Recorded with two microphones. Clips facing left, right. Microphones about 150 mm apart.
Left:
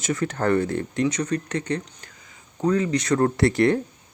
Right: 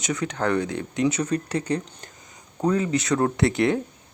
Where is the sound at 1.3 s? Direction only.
35° right (ahead or behind).